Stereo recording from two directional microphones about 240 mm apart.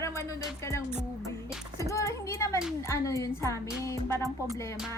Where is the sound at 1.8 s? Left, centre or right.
Centre.